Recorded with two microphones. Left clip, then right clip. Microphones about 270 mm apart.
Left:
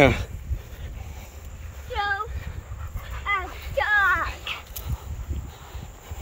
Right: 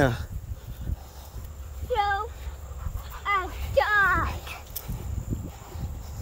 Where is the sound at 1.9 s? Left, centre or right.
Right.